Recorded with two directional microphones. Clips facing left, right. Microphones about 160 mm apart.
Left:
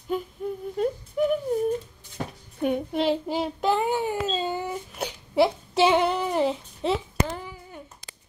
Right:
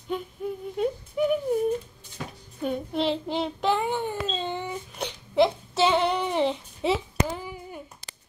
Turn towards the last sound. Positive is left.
turn(degrees=-5)  # may be behind; listen again after turning